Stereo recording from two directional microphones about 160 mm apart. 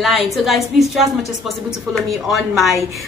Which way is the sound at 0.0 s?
Centre (ahead or behind).